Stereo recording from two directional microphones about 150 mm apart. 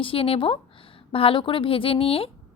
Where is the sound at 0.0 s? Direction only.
40° left (ahead or behind).